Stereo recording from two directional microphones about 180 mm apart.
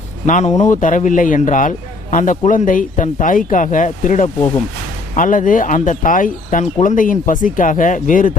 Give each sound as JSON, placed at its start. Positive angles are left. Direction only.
{"t": 0.3, "sound": "a man's voice", "side_deg": 45}